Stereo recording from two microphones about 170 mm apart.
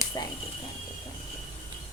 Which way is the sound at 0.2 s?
25° left (ahead or behind).